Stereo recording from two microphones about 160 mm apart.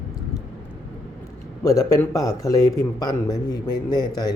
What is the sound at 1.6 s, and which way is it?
A man's voice, 20° left (ahead or behind).